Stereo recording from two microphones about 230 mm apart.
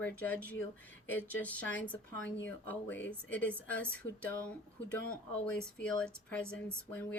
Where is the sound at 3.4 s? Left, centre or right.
Centre.